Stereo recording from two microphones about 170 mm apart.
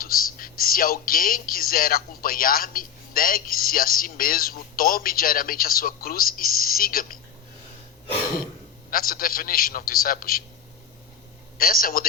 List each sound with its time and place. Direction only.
0.0 s speech: 60° left (ahead or behind)
8.9 s speech: 60° left (ahead or behind)
11.5 s speech: 60° left (ahead or behind)